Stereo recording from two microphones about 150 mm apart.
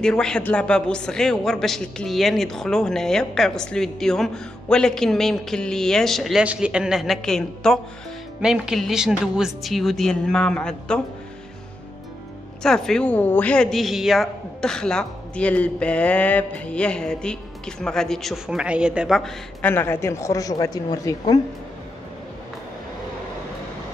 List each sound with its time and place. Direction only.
0.0 s a man's voice: 5° left (ahead or behind)
12.6 s a man's voice: 5° left (ahead or behind)
19.6 s a woman's voice: 15° left (ahead or behind)